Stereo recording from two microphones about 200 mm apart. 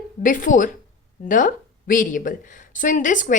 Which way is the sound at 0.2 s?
40° left (ahead or behind).